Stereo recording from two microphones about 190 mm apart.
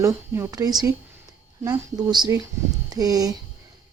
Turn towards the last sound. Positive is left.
turn(degrees=-20)  # may be behind; listen again after turning